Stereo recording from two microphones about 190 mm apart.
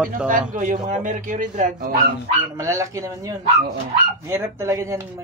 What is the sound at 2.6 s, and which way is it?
Speech, 15° right (ahead or behind).